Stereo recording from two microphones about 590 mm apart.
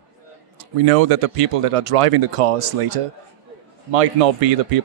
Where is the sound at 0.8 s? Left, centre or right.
Right.